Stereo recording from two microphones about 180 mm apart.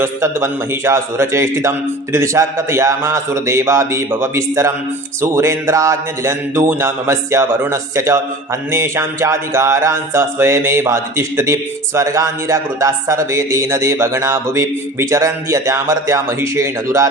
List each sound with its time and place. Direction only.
0.0 s speech: 15° right (ahead or behind)